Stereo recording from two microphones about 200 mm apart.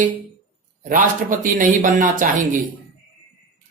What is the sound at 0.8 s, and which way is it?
A man's voice, 45° right (ahead or behind).